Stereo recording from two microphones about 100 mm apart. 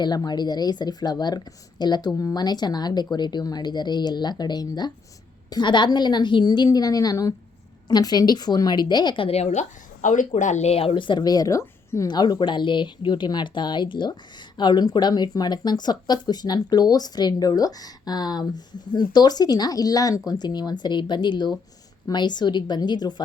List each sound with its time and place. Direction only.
0.0 s speech: 45° left (ahead or behind); by 9.6 s 90° left
10.6 s speech: 85° left; by 12.0 s 30° left (ahead or behind)
12.0 s speech: 45° left (ahead or behind)